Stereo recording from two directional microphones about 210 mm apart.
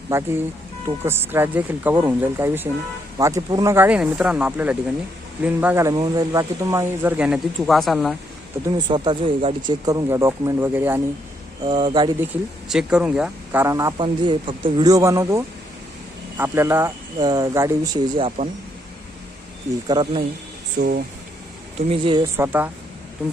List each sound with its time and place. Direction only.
0.1 s speech: 10° right (ahead or behind)
8.6 s speech: 25° right (ahead or behind)
11.6 s speech: 25° right (ahead or behind)
12.2 s speech: 5° right (ahead or behind); by 18.4 s 25° right (ahead or behind)
19.9 s speech: 20° right (ahead or behind)
20.7 s speech: 40° right (ahead or behind)
21.8 s speech: 25° right (ahead or behind)
22.4 s speech: 10° right (ahead or behind)